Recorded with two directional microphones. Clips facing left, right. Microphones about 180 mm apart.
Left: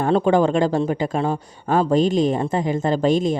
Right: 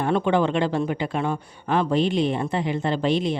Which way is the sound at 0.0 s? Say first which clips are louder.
Left 4 dB; 40° left (ahead or behind).